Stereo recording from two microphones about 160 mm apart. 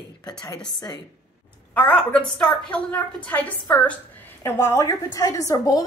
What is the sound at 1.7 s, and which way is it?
A woman's voice, 5° left (ahead or behind).